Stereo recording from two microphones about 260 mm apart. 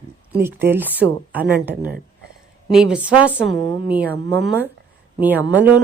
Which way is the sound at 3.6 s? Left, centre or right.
Centre.